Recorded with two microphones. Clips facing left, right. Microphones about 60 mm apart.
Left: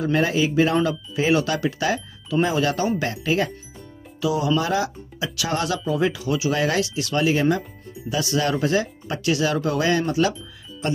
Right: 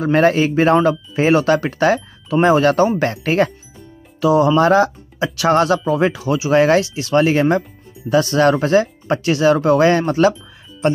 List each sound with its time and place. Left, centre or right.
0.0 s a man's voice: right